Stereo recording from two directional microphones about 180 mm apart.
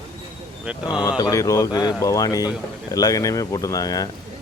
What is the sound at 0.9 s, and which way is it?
Speech, 20° left (ahead or behind).